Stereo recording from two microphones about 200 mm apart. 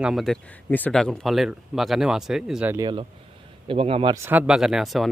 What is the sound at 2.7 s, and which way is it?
Speech, 20° right (ahead or behind).